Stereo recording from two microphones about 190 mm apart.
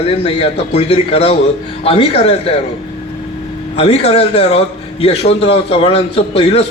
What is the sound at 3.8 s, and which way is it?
A man's voice, 35° left (ahead or behind).